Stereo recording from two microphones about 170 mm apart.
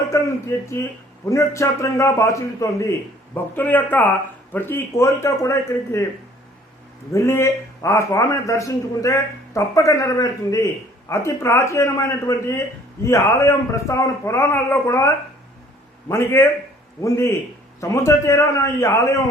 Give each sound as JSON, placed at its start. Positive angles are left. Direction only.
{"t": 0.1, "sound": "a man's voice", "side_deg": 15}
{"t": 7.1, "sound": "a man's voice", "side_deg": 15}